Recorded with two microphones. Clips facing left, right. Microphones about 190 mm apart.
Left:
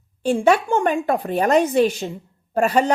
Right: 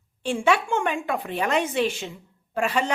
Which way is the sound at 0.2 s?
40° left (ahead or behind).